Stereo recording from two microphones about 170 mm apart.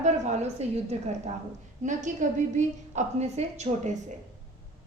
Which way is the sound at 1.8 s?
45° right (ahead or behind).